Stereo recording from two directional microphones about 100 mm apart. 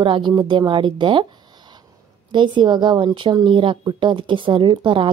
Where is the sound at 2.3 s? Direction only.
55° right (ahead or behind).